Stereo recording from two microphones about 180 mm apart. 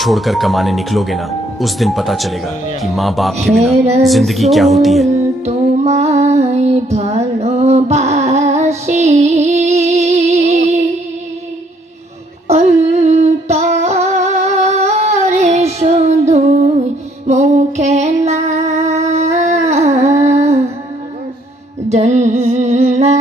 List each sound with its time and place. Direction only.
0.0 s speech: centre (ahead or behind)
5.4 s music: 35° right (ahead or behind)
12.4 s a sound: 35° right (ahead or behind)
12.8 s music: 35° right (ahead or behind)
17.3 s female singing: 40° right (ahead or behind)
19.0 s humming: 40° right (ahead or behind)
21.8 s music: 40° right (ahead or behind)